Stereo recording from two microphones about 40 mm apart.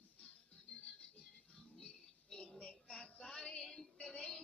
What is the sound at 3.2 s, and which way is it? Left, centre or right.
Music, left.